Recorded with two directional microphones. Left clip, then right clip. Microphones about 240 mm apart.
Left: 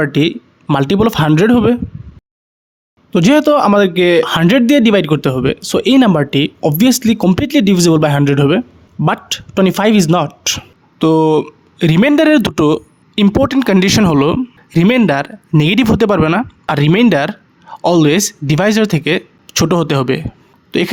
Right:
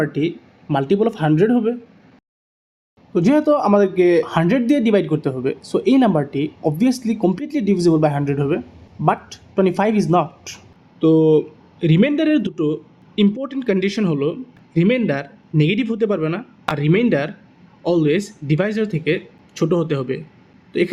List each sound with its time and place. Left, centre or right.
0.0 s speech: left
3.1 s speech: left